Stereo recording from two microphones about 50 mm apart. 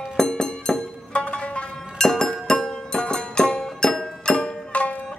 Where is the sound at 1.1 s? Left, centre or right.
Left.